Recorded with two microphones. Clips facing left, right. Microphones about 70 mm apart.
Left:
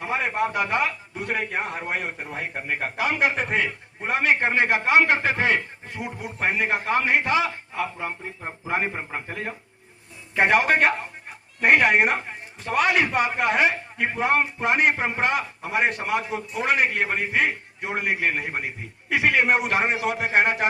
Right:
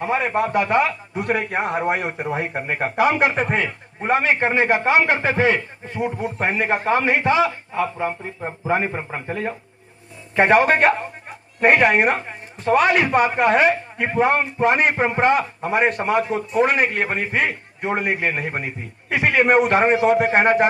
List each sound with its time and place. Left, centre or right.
0.3 s a man's voice: right
3.0 s speech: centre
3.4 s a man's voice: right
10.3 s a man's voice: right